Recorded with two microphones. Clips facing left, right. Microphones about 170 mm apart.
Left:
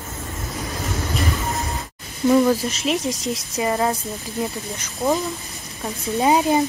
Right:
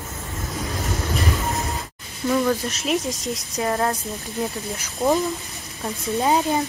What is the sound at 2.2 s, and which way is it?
Speech, 20° left (ahead or behind).